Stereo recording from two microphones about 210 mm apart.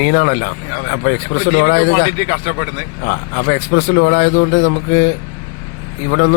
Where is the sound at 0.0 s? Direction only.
55° left (ahead or behind).